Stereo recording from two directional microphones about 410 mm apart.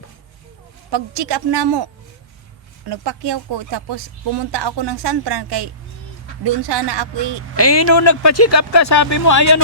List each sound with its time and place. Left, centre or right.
0.9 s a woman's voice: right
2.9 s speech: right
7.5 s speech: left